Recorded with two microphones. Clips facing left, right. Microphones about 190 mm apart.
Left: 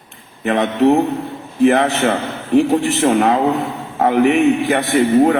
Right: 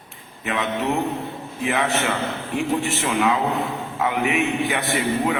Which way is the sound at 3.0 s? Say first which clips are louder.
Left 7 dB; 45° left (ahead or behind).